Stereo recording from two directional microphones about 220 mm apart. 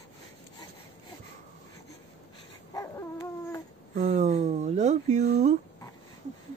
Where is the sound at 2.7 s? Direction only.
15° left (ahead or behind).